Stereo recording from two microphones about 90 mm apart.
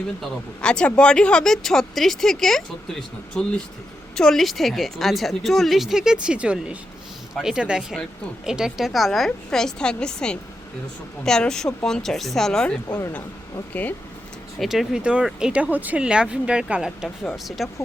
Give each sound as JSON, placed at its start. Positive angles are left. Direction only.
{"t": 0.2, "sound": "speech", "side_deg": 10}
{"t": 14.6, "sound": "speech", "side_deg": -5}